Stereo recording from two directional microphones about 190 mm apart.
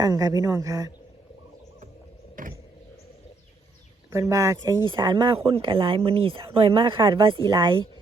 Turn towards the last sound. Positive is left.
turn(degrees=-25)  # may be behind; listen again after turning